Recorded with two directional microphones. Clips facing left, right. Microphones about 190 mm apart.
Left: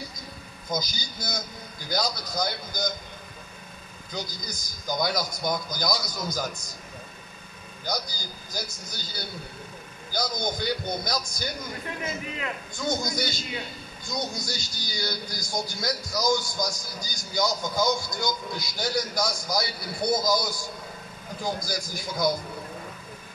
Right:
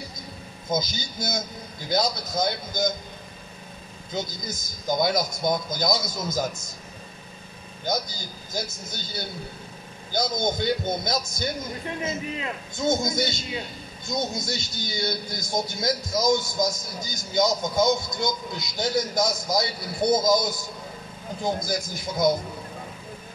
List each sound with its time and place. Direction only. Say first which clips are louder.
0.7 s speech: right 4 dB; 25° right (ahead or behind)
4.1 s speech: right 4 dB; 25° right (ahead or behind)
7.8 s speech: right 4 dB; 25° right (ahead or behind)